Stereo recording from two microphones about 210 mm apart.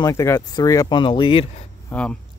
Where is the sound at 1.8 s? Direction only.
5° left (ahead or behind).